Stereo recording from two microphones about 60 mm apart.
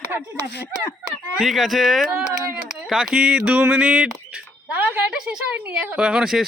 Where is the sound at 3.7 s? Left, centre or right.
Centre.